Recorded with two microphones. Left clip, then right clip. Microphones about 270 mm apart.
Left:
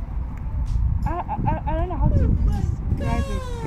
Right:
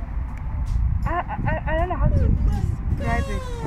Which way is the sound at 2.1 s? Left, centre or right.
Centre.